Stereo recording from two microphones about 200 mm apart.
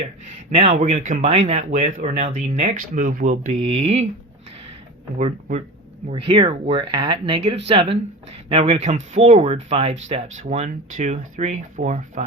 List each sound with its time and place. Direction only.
0.5 s speech: 30° right (ahead or behind)
5.1 s speech: 35° right (ahead or behind)